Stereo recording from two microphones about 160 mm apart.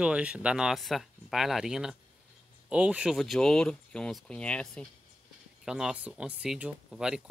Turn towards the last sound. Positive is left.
turn(degrees=-5)  # may be behind; listen again after turning